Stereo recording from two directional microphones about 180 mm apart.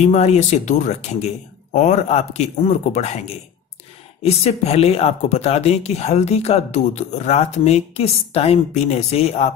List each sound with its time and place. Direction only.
0.0 s speech: 40° left (ahead or behind)